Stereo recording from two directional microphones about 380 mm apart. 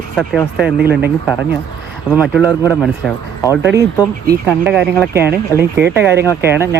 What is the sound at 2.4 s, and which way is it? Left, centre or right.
Speech, centre.